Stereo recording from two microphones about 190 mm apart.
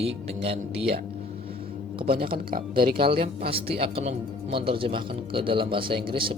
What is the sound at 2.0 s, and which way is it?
Speech, 50° right (ahead or behind).